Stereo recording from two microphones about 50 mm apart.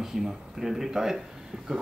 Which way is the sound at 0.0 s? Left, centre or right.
Centre.